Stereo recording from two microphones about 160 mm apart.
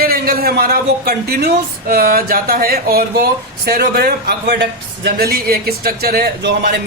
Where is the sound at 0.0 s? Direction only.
65° right (ahead or behind); by 4.6 s 85° right.